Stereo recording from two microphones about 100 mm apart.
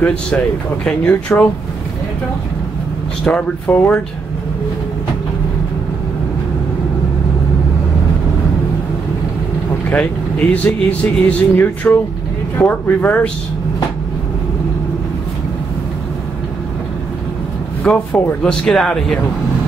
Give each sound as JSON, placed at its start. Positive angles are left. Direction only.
{"t": 0.0, "sound": "speech", "side_deg": 10}
{"t": 3.3, "sound": "speech", "side_deg": 10}
{"t": 9.8, "sound": "speech", "side_deg": 15}
{"t": 17.8, "sound": "speech", "side_deg": 10}